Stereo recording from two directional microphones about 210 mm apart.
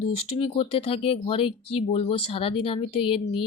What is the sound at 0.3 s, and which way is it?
Speech, 25° left (ahead or behind).